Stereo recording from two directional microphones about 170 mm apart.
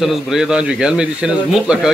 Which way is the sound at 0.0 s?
Centre (ahead or behind).